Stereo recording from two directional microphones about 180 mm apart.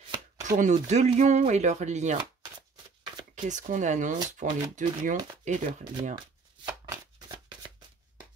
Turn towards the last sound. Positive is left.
turn(degrees=-25)  # may be behind; listen again after turning